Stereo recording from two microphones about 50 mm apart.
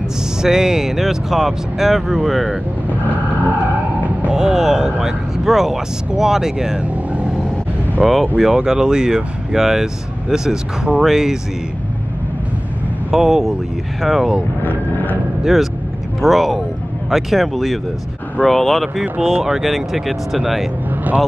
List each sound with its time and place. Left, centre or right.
0.4 s speech: centre
3.1 s vehicle: right
4.3 s speech: centre
8.0 s speech: centre
13.1 s speech: centre
14.6 s vehicle: left
15.4 s speech: centre
19.1 s speech: centre
20.9 s vehicle: right